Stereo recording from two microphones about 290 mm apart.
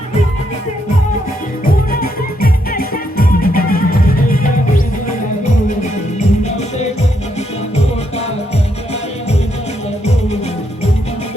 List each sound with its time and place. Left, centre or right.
1.9 s music: left
6.1 s music: left